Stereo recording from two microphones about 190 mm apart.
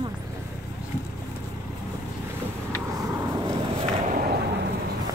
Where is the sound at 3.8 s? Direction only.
50° right (ahead or behind).